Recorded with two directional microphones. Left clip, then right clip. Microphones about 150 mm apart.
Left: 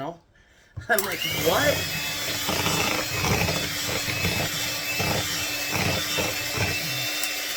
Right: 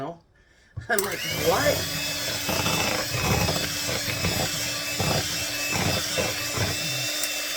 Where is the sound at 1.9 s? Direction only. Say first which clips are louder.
Even; 10° right (ahead or behind).